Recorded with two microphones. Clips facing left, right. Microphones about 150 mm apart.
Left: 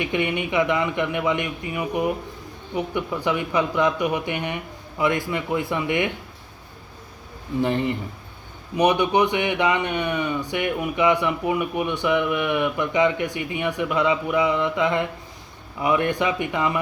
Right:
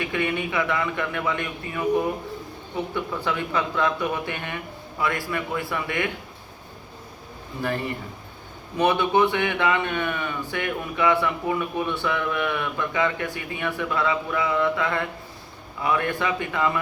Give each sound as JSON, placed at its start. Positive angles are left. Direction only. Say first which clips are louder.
{"t": 0.0, "sound": "a man's voice", "louder": "left 2 dB", "side_deg": 20}
{"t": 7.6, "sound": "a man's voice", "louder": "left 5 dB", "side_deg": 20}